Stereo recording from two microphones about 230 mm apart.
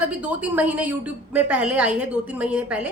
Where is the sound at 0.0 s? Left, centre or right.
Centre.